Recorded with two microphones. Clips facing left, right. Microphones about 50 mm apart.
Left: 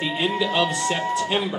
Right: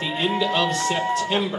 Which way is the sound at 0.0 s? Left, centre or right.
Centre.